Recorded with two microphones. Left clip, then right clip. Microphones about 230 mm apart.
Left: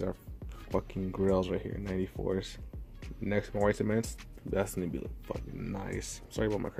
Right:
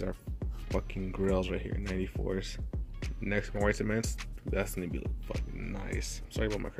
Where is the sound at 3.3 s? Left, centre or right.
Centre.